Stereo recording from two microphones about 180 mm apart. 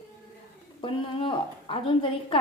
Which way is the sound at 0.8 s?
25° left (ahead or behind).